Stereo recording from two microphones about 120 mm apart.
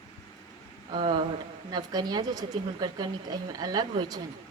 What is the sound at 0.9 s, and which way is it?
A woman's voice, 45° right (ahead or behind).